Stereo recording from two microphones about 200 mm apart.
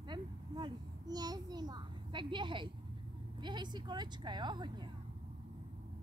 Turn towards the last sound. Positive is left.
turn(degrees=-20)  # may be behind; listen again after turning